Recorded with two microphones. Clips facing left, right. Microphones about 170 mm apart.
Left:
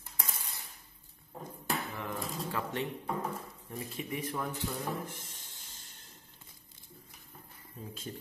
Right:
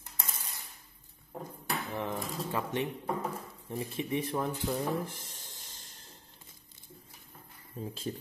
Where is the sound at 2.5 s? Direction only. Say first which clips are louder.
Right 4 dB; 20° right (ahead or behind).